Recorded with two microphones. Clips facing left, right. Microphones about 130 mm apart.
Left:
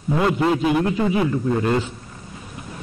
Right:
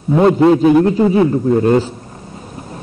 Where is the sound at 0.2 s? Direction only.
35° right (ahead or behind).